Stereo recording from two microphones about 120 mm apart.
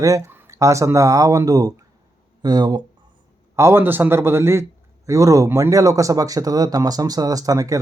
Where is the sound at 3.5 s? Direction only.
20° right (ahead or behind).